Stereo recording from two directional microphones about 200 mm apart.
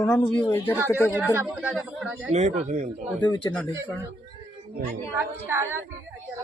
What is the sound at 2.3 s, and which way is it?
Speech, 35° right (ahead or behind).